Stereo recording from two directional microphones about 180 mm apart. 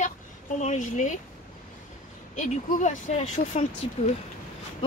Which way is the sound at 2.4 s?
45° left (ahead or behind).